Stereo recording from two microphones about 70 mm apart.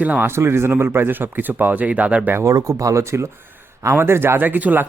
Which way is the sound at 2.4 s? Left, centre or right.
Right.